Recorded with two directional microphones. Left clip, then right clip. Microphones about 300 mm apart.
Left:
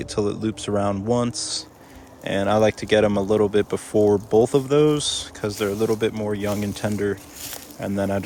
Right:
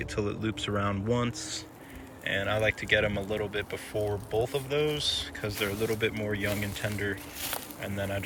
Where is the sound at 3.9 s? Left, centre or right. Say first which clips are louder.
Left 13 dB; left.